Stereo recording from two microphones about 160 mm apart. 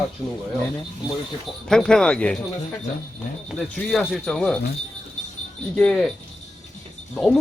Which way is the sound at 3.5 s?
Centre (ahead or behind).